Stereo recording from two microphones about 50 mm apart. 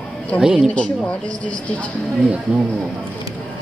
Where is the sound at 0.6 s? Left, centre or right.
Left.